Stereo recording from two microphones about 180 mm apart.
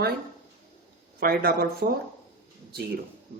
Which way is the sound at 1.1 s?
55° right (ahead or behind).